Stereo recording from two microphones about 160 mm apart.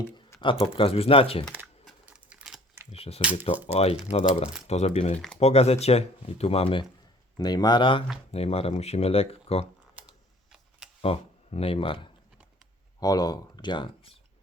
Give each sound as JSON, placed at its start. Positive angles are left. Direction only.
{"t": 0.6, "sound": "speech", "side_deg": 35}
{"t": 1.6, "sound": "scissors", "side_deg": 0}
{"t": 2.9, "sound": "speech", "side_deg": 40}
{"t": 5.1, "sound": "speech", "side_deg": 5}
{"t": 5.4, "sound": "speech", "side_deg": 40}
{"t": 7.3, "sound": "speech", "side_deg": 25}
{"t": 9.9, "sound": "camera", "side_deg": -5}
{"t": 11.0, "sound": "speech", "side_deg": 35}
{"t": 13.0, "sound": "speech", "side_deg": 25}